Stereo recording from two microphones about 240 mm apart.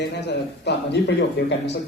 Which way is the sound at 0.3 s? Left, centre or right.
Left.